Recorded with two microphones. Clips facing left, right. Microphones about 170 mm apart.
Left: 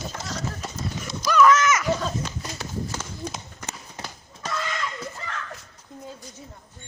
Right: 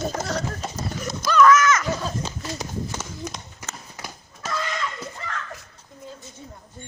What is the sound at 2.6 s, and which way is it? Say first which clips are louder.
Horse: right 1 dB; 15° right (ahead or behind).